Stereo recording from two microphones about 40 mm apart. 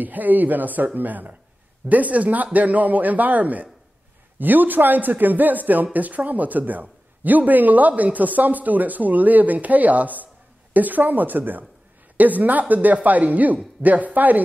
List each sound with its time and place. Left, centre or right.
0.0 s a man's voice: right